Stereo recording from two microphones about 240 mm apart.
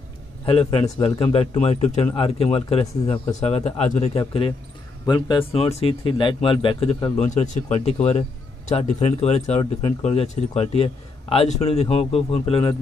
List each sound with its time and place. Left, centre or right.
0.5 s a man's voice: left